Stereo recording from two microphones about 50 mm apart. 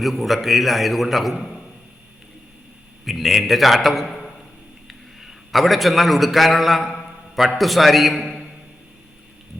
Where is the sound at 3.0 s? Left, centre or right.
Centre.